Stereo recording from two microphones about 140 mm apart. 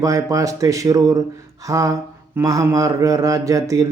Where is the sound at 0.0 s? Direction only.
25° right (ahead or behind).